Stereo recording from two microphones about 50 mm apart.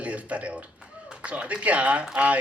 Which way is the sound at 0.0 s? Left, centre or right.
Right.